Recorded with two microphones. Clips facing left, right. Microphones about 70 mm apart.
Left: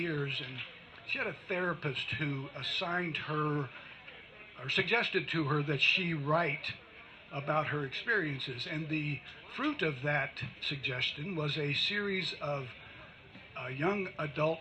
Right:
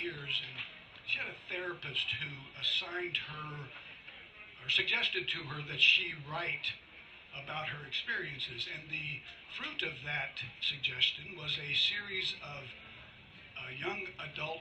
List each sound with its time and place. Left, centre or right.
0.0 s speech: left
3.2 s speech: left